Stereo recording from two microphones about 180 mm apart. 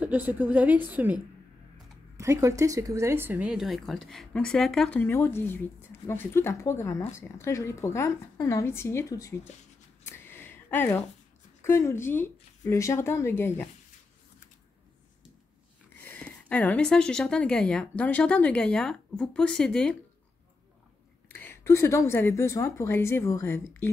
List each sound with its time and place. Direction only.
0.0 s a woman's voice: 10° right (ahead or behind); by 9.5 s 15° left (ahead or behind)
10.0 s a sound: 10° left (ahead or behind)
11.6 s speech: 15° left (ahead or behind)
16.0 s a woman's voice: 10° left (ahead or behind)
21.3 s speech: 10° left (ahead or behind)